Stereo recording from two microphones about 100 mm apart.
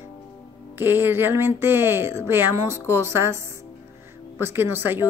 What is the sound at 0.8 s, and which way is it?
Speech, 20° right (ahead or behind).